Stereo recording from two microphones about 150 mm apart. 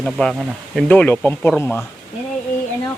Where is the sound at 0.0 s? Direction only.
5° left (ahead or behind).